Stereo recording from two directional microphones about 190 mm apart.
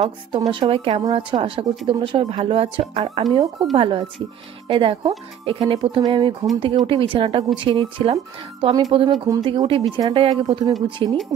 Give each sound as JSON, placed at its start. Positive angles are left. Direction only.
{"t": 0.5, "sound": "speech", "side_deg": -25}